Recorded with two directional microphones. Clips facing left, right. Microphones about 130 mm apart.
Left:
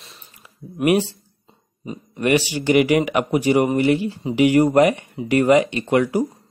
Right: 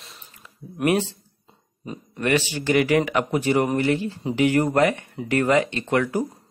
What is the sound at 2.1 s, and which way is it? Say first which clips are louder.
Speech: left 4 dB; 15° left (ahead or behind).